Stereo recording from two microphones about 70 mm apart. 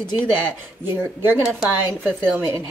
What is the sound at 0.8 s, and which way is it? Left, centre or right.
Speech, right.